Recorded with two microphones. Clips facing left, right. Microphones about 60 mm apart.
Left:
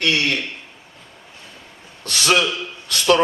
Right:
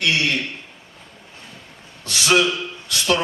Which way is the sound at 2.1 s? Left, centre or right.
Left.